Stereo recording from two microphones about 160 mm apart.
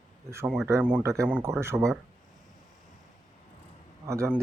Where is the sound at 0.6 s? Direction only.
15° right (ahead or behind).